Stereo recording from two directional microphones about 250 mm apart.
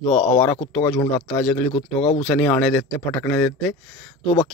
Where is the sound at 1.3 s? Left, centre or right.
Centre.